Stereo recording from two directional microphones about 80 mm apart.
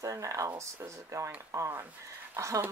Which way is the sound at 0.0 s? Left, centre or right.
Right.